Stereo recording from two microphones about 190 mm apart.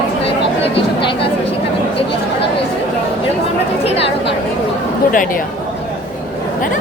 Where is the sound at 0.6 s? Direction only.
30° left (ahead or behind).